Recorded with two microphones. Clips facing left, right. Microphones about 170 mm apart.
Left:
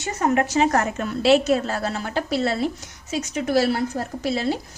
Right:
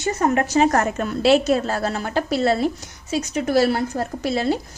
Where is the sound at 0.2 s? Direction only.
45° right (ahead or behind).